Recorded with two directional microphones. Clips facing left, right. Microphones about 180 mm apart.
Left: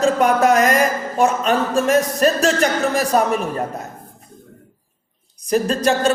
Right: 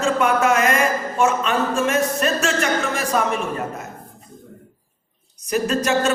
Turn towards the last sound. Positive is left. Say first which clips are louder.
# left 2 dB
turn(degrees=35)  # may be behind; listen again after turning